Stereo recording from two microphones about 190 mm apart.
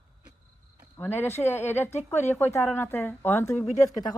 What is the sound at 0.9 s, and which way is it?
A woman's voice, 10° left (ahead or behind).